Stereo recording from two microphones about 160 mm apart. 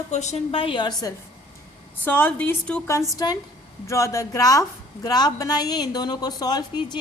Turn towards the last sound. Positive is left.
turn(degrees=25)  # may be behind; listen again after turning